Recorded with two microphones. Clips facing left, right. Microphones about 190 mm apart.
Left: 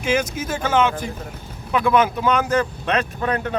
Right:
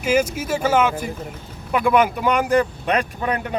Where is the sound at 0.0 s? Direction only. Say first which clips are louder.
Right 2 dB; 10° right (ahead or behind).